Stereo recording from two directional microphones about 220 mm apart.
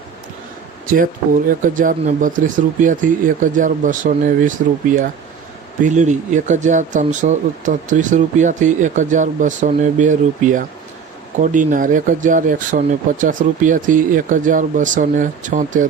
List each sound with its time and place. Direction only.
0.9 s speech: 40° right (ahead or behind)
11.7 s speech: 35° right (ahead or behind)